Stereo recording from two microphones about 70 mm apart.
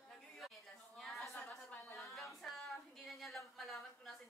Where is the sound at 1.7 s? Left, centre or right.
Left.